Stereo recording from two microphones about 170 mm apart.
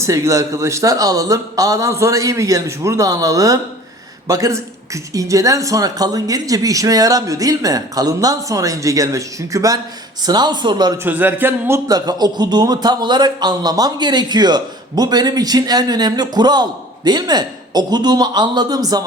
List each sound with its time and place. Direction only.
0.0 s a man's voice: 15° right (ahead or behind)
11.0 s a man's voice: 10° right (ahead or behind)